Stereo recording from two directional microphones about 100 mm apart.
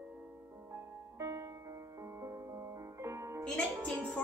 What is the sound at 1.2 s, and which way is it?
Music, 30° right (ahead or behind).